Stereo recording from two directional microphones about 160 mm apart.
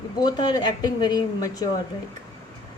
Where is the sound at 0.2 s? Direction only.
25° left (ahead or behind).